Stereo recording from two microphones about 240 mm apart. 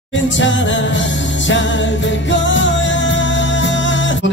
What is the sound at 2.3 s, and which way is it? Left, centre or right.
Music, left.